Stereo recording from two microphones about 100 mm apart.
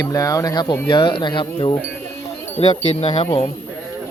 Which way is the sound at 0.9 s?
55° left (ahead or behind).